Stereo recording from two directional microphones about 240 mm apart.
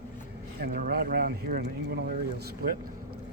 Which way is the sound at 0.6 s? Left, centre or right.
Right.